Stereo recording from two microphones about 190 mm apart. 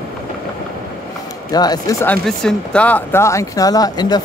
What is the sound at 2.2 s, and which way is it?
Speech, 5° left (ahead or behind).